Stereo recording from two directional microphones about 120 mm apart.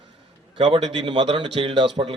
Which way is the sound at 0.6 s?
45° right (ahead or behind).